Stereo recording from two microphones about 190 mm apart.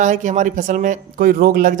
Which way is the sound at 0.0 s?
40° right (ahead or behind).